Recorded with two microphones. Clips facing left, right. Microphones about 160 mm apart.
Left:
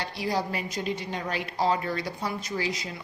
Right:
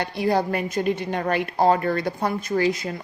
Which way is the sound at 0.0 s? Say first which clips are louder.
Right 7 dB; 55° right (ahead or behind).